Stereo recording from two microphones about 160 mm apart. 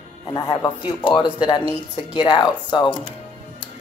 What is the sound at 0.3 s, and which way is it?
Speech, 20° left (ahead or behind).